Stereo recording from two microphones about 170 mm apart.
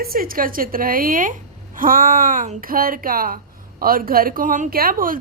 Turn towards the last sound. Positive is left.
turn(degrees=-55)  # may be behind; listen again after turning